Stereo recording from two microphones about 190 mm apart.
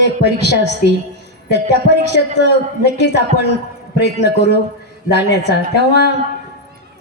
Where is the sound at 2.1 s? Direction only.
60° left (ahead or behind).